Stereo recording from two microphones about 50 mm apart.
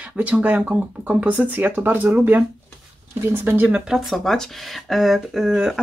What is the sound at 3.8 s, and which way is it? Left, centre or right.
Speech, centre.